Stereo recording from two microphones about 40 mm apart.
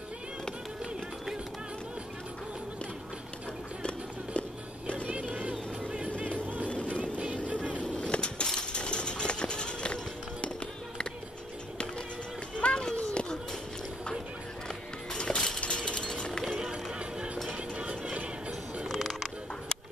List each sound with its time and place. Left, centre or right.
3.8 s music: left
5.0 s music: right
6.7 s music: left
7.0 s music: right
7.9 s skateboard: left
8.5 s a sound: left
12.5 s a sound: left
15.1 s a sound: centre
17.5 s music: right
18.9 s music: centre